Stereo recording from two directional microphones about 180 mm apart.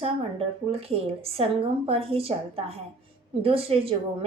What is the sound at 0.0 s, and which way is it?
A woman's voice, 30° right (ahead or behind).